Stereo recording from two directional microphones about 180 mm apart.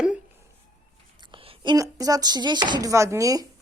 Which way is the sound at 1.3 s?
30° right (ahead or behind).